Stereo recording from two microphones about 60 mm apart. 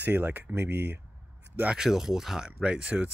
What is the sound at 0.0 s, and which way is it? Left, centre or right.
Speech, right.